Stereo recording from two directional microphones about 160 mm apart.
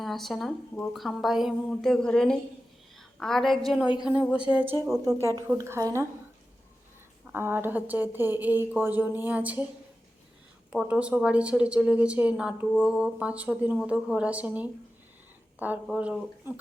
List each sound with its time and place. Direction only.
0.0 s a woman's voice: centre (ahead or behind); by 6.1 s 15° right (ahead or behind)
7.3 s speech: 15° right (ahead or behind)
10.7 s speech: 5° right (ahead or behind)